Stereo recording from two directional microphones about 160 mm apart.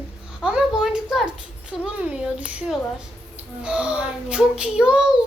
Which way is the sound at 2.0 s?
5° right (ahead or behind).